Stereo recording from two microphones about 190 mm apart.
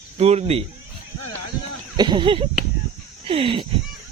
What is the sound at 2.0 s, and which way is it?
Speech, 25° right (ahead or behind).